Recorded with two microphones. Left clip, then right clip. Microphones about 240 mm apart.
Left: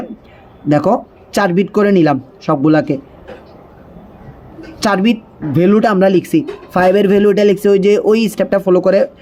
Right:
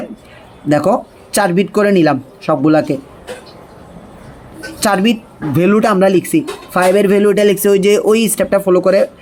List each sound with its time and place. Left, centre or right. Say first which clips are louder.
0.7 s speech: even; centre
4.8 s speech: right 1 dB; centre